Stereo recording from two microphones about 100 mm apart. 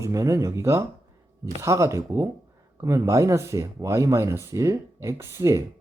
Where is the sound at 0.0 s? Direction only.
30° right (ahead or behind).